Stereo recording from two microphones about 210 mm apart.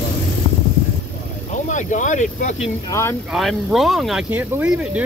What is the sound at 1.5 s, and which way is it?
Vehicle, 35° left (ahead or behind).